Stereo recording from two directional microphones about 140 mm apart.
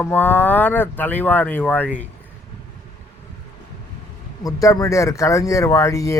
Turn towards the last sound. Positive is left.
turn(degrees=25)  # may be behind; listen again after turning